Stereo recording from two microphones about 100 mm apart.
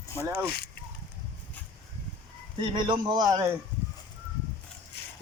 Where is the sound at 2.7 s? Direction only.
50° right (ahead or behind).